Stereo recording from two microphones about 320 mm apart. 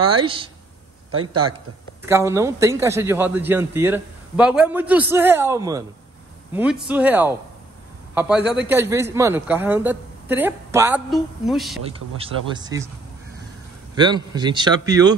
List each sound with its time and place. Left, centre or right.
0.2 s a man's voice: centre
2.0 s a man's voice: centre
11.8 s a man's voice: centre
13.9 s a man's voice: centre